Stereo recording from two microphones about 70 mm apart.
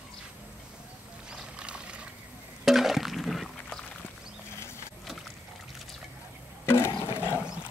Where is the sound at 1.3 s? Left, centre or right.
Centre.